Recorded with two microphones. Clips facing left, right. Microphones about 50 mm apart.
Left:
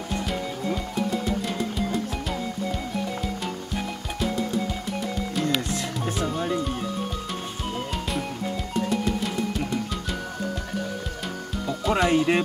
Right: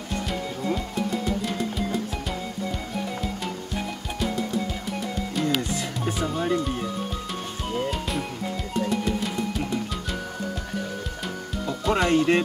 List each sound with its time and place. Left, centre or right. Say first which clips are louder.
0.3 s music: right 2 dB; centre
5.3 s music: right 1 dB; centre
11.6 s music: even; centre